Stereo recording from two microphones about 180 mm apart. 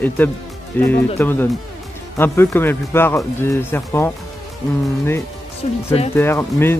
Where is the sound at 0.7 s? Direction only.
10° left (ahead or behind).